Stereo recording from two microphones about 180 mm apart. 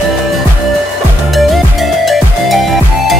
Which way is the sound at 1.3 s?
Centre (ahead or behind).